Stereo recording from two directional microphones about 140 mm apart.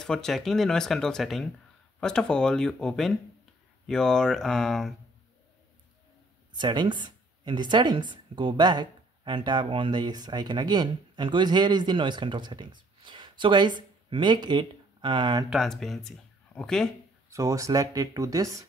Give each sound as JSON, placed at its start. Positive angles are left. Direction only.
{"t": 0.0, "sound": "speech", "side_deg": 5}
{"t": 6.5, "sound": "speech", "side_deg": -30}
{"t": 15.5, "sound": "speech", "side_deg": 0}
{"t": 17.3, "sound": "speech", "side_deg": -25}